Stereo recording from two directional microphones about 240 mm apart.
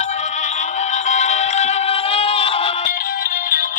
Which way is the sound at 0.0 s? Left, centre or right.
Left.